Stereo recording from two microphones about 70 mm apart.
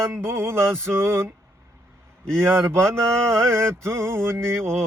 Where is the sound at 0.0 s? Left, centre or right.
Right.